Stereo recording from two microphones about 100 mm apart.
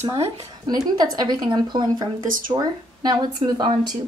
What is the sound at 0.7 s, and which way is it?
Speech, 40° right (ahead or behind).